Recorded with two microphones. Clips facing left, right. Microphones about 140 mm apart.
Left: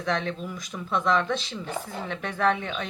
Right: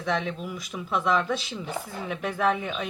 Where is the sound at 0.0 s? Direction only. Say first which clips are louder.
Even; 5° right (ahead or behind).